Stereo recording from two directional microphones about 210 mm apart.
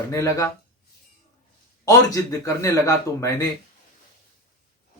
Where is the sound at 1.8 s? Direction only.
15° left (ahead or behind).